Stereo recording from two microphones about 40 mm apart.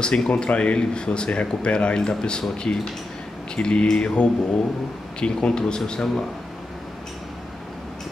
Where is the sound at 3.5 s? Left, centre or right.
Left.